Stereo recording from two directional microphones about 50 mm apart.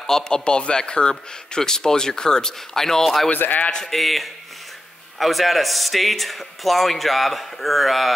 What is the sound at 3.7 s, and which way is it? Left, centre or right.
A man's voice, centre.